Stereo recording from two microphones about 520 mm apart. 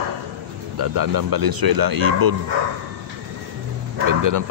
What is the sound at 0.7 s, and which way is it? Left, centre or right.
Speech, right.